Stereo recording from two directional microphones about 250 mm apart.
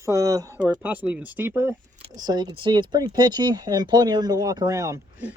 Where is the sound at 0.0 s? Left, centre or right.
Centre.